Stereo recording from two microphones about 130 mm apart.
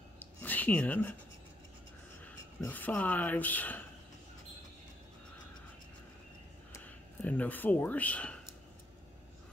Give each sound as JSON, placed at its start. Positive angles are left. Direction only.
{"t": 0.2, "sound": "a sound", "side_deg": 15}
{"t": 2.2, "sound": "speech", "side_deg": 15}
{"t": 6.8, "sound": "speech", "side_deg": 10}